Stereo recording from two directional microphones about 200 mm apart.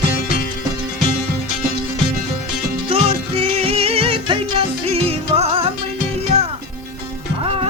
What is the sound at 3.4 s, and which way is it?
Music, 30° right (ahead or behind).